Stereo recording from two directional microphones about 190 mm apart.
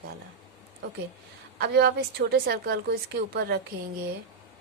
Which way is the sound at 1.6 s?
55° right (ahead or behind).